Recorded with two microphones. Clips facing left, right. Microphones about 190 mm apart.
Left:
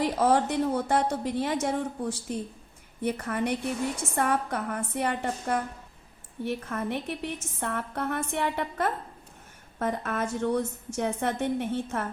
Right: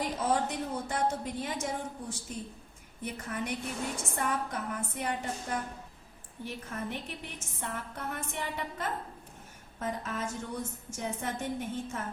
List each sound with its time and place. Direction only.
0.0 s a woman's voice: 70° left (ahead or behind)